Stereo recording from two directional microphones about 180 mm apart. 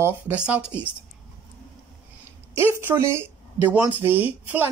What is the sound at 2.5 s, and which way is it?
Speech, 15° right (ahead or behind).